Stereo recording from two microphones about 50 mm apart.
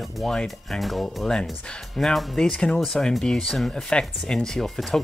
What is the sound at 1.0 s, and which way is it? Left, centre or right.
Speech, centre.